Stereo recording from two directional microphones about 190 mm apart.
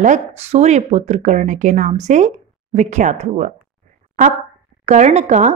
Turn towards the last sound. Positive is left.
turn(degrees=-40)  # may be behind; listen again after turning